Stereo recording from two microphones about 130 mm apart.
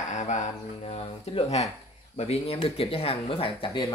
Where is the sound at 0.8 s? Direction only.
55° left (ahead or behind).